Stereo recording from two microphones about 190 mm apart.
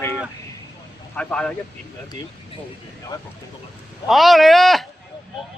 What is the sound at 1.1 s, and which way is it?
Speech, 5° left (ahead or behind).